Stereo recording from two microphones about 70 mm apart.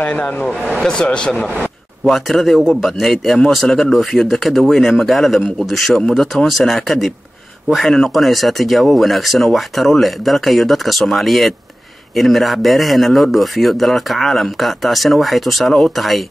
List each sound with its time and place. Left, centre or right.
0.0 s speech: centre
2.0 s a man's voice: centre